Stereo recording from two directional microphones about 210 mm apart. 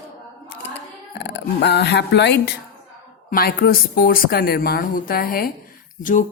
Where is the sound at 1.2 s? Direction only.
55° left (ahead or behind).